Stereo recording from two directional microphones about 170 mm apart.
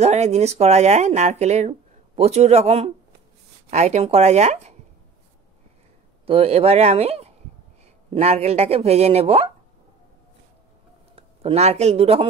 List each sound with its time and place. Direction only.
0.0 s speech: 40° right (ahead or behind)
6.2 s speech: 35° right (ahead or behind)
11.1 s speech: 35° right (ahead or behind)